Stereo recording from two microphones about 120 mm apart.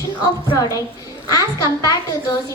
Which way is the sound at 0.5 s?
30° left (ahead or behind).